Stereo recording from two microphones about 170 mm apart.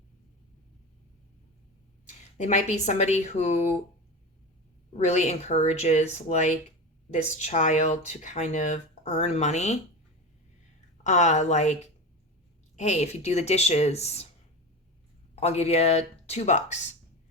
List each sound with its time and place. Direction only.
2.0 s speech: 40° left (ahead or behind)
4.9 s speech: 40° left (ahead or behind)
11.0 s speech: 45° left (ahead or behind)
15.4 s speech: 40° left (ahead or behind)